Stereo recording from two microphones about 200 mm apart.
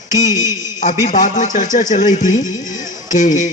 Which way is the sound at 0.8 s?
35° left (ahead or behind).